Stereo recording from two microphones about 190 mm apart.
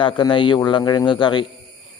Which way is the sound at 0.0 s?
25° left (ahead or behind).